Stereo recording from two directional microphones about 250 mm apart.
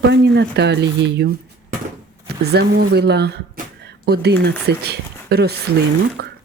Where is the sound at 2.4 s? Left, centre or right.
Right.